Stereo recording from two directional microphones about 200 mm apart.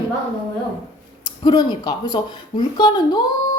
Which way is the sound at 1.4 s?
20° left (ahead or behind).